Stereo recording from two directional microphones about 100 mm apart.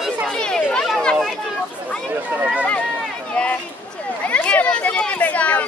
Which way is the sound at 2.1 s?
20° right (ahead or behind).